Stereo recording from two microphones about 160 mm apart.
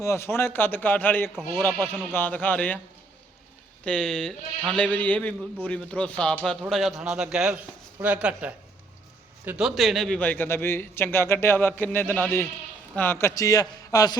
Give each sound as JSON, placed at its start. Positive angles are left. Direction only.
{"t": 0.0, "sound": "a man's voice", "side_deg": 15}
{"t": 3.8, "sound": "a man's voice", "side_deg": 5}